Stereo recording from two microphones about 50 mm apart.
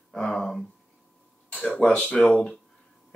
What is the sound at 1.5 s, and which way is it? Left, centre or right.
Speech, left.